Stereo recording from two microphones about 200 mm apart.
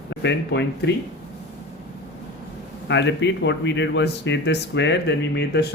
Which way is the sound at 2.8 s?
60° left (ahead or behind).